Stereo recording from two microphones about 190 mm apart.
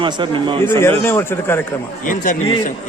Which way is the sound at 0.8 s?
10° left (ahead or behind).